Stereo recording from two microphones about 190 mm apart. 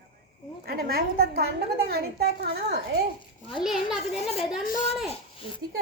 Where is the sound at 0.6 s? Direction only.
55° right (ahead or behind).